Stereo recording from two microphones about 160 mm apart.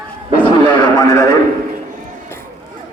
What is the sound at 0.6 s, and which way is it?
Radio, 25° left (ahead or behind).